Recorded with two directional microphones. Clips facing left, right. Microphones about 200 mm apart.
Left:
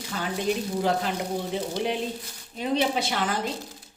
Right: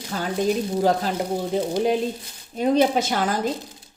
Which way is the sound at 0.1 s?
40° right (ahead or behind).